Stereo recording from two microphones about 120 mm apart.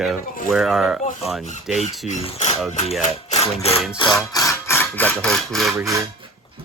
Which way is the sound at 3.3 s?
65° left (ahead or behind).